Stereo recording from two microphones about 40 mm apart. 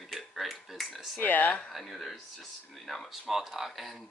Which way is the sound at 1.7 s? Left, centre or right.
Centre.